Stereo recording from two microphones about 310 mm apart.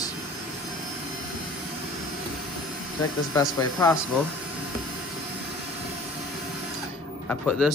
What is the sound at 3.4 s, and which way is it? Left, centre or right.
Speech, centre.